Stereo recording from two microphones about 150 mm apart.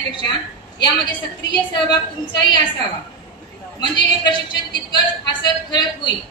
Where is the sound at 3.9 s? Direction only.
30° left (ahead or behind).